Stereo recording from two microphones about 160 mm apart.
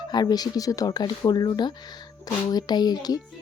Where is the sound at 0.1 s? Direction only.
25° left (ahead or behind).